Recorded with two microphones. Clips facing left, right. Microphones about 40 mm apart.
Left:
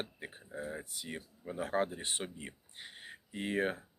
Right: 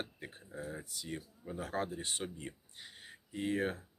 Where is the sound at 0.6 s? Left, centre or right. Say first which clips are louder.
Left 1 dB; left.